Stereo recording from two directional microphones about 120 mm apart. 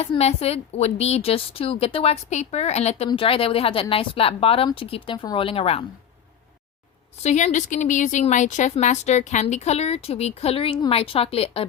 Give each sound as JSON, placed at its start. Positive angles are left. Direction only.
{"t": 0.0, "sound": "a woman's voice", "side_deg": 60}
{"t": 3.1, "sound": "speech", "side_deg": 50}
{"t": 7.2, "sound": "speech", "side_deg": 75}